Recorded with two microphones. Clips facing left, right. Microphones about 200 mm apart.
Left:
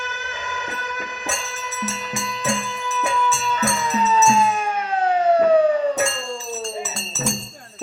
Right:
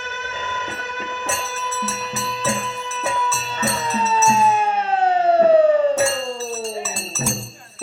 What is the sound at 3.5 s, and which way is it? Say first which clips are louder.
Music: left 1 dB; 30° right (ahead or behind).